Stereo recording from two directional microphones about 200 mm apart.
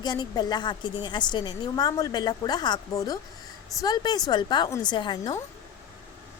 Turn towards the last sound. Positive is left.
turn(degrees=20)  # may be behind; listen again after turning